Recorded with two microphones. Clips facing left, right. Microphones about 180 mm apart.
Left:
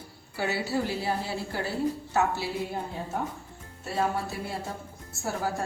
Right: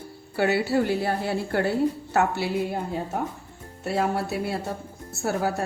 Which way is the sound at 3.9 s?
70° right (ahead or behind).